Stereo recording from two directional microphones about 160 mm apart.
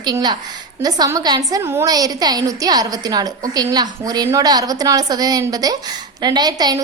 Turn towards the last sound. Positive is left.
turn(degrees=-25)  # may be behind; listen again after turning